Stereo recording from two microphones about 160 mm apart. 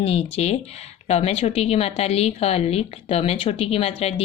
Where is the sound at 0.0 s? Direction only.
40° left (ahead or behind).